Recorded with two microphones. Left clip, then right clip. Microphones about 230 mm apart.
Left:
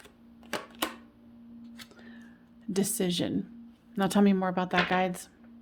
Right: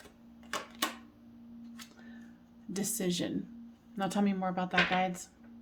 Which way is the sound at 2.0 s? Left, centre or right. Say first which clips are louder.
Left 2 dB; left.